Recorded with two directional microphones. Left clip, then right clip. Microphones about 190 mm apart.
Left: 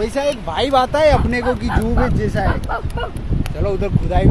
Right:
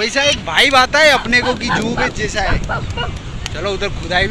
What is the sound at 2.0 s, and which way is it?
Speech, 35° left (ahead or behind).